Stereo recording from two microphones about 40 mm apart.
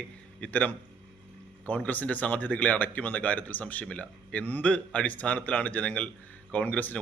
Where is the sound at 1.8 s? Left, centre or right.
Left.